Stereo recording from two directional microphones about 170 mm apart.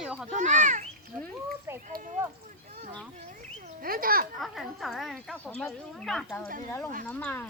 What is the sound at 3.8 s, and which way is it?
Speech, 60° right (ahead or behind).